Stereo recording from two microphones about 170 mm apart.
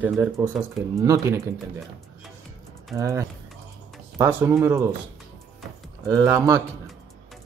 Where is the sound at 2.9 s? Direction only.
15° right (ahead or behind).